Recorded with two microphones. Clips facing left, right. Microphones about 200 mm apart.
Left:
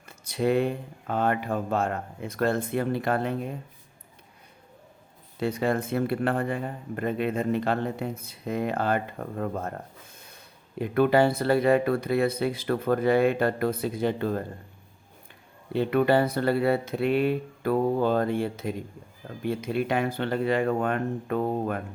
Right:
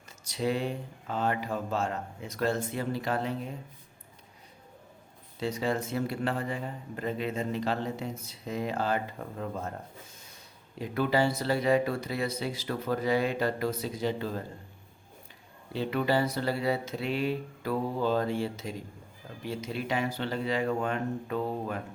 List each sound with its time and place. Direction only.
0.3 s speech: 55° left (ahead or behind)
5.4 s speech: 55° left (ahead or behind)
15.7 s speech: 55° left (ahead or behind)